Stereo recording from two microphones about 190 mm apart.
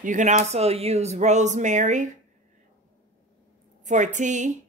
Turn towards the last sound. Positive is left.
turn(degrees=-40)  # may be behind; listen again after turning